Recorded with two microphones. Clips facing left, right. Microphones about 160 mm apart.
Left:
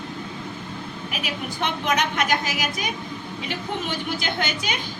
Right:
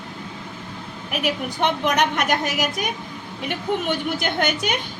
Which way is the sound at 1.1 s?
60° right (ahead or behind).